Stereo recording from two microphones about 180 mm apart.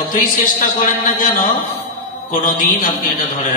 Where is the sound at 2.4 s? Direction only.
45° left (ahead or behind).